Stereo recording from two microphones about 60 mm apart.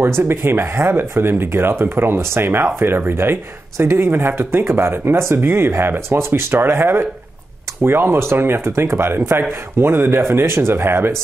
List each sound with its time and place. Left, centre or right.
0.0 s speech: right